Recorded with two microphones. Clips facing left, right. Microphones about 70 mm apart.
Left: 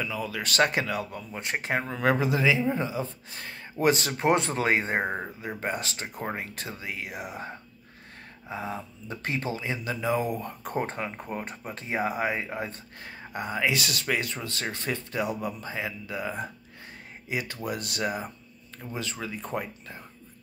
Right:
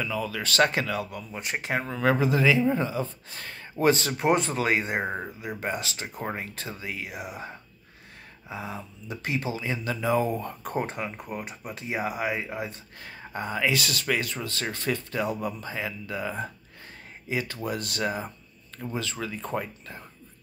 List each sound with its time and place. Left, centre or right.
0.0 s speech: left
5.0 s speech: centre
8.5 s speech: left
9.7 s speech: left